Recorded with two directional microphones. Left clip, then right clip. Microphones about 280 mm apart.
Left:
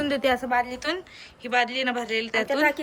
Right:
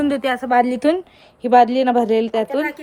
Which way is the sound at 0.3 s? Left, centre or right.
Centre.